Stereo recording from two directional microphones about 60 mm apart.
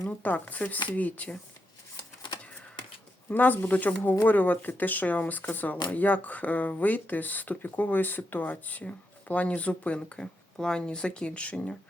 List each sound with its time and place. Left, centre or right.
0.2 s speech: left
3.2 s speech: left